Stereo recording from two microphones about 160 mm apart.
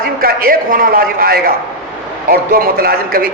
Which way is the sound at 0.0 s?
65° right (ahead or behind).